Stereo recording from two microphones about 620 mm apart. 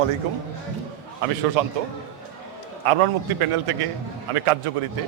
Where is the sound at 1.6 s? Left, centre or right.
Right.